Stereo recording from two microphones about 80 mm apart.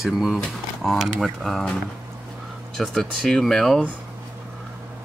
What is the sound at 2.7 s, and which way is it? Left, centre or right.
Speech, centre.